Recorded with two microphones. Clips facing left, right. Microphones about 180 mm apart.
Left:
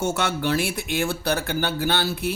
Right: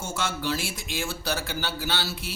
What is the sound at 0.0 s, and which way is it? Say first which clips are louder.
Speech: left 6 dB; 65° left (ahead or behind).